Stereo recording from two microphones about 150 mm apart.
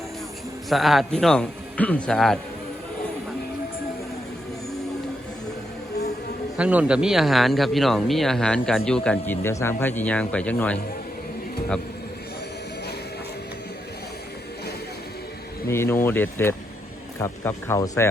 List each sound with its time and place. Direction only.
0.7 s speech: centre (ahead or behind)
6.6 s speech: 10° right (ahead or behind); by 10.8 s 10° left (ahead or behind)
15.6 s speech: 15° left (ahead or behind)